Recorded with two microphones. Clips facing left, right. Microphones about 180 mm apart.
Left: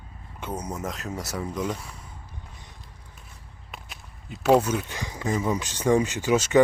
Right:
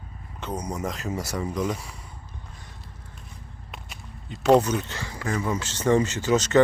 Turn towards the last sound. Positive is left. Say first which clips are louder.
# even
turn(degrees=10)  # may be behind; listen again after turning